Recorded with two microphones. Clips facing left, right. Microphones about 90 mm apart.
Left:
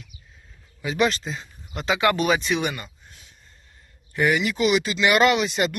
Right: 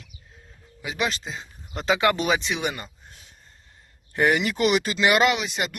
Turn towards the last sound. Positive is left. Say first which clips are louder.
# left 4 dB
turn(degrees=-5)  # may be behind; listen again after turning